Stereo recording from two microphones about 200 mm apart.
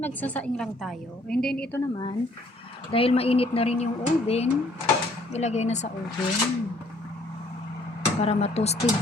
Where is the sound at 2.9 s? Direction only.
30° left (ahead or behind).